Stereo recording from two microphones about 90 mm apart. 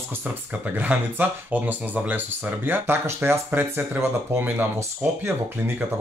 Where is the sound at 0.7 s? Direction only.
20° right (ahead or behind).